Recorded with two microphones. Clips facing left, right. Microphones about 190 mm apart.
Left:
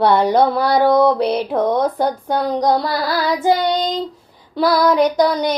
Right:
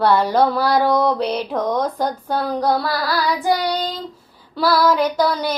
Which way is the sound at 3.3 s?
25° left (ahead or behind).